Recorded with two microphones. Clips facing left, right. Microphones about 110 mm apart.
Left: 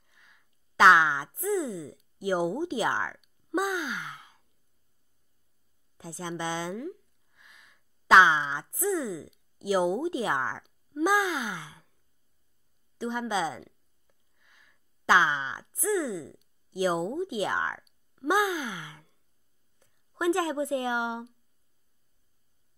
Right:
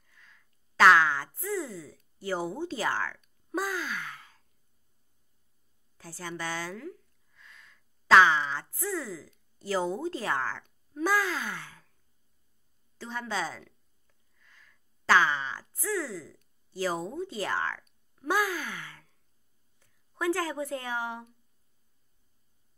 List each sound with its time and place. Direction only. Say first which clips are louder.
0.0 s a sound: right 1 dB; 20° left (ahead or behind)
5.9 s speech: left 3 dB; 20° left (ahead or behind)
12.9 s speech: left 5 dB; 15° left (ahead or behind)